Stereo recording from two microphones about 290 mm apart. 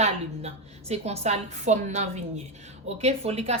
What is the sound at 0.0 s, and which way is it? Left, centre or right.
A woman's voice, right.